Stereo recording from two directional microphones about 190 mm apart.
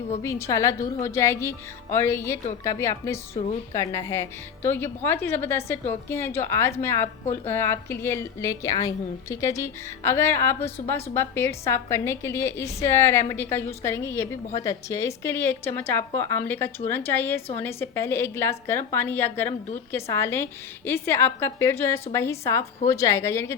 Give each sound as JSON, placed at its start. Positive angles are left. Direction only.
{"t": 0.2, "sound": "a woman's voice", "side_deg": 15}